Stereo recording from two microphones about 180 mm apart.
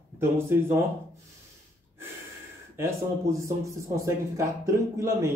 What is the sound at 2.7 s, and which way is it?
Speech, 15° right (ahead or behind).